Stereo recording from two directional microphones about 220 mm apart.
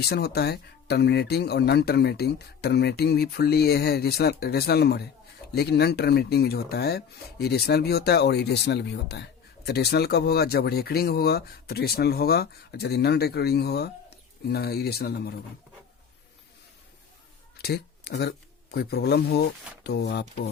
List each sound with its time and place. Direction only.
0.0 s speech: 45° left (ahead or behind)
17.6 s a sound: 45° left (ahead or behind)
18.2 s speech: 45° left (ahead or behind)